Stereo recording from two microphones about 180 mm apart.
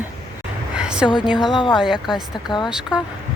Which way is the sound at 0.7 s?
5° right (ahead or behind).